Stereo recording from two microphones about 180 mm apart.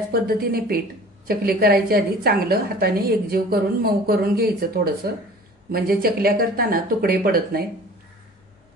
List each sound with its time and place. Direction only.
0.1 s a woman's voice: 55° right (ahead or behind)